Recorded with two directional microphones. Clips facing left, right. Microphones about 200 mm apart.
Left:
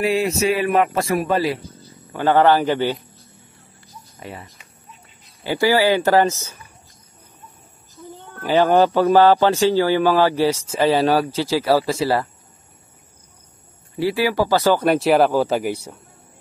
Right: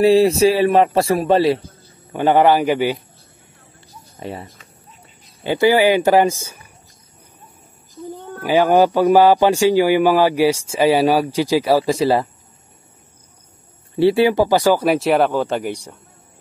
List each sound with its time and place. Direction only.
0.0 s speech: 30° right (ahead or behind)
2.1 s a man's voice: 15° right (ahead or behind)
4.2 s a man's voice: 30° right (ahead or behind); by 6.6 s 10° right (ahead or behind)
8.4 s a man's voice: 10° right (ahead or behind)
13.9 s speech: 25° right (ahead or behind); by 16.0 s 5° left (ahead or behind)